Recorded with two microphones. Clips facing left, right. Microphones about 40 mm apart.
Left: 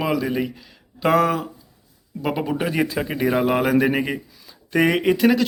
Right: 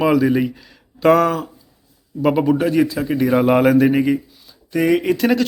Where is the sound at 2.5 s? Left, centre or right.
Centre.